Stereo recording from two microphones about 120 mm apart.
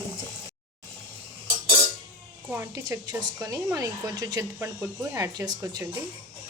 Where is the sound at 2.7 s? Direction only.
30° right (ahead or behind).